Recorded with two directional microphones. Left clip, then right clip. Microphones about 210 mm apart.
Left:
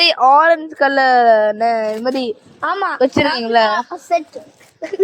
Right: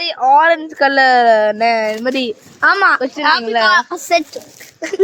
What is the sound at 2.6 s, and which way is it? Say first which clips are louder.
Speech: right 8 dB; 60° right (ahead or behind).